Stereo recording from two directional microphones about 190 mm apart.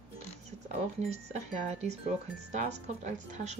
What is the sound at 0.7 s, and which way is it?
Speech, 35° right (ahead or behind).